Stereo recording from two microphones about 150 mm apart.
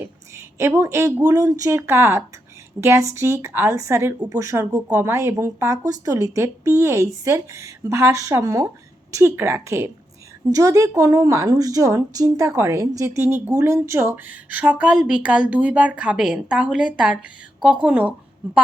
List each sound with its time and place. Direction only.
0.0 s a woman's voice: 15° right (ahead or behind)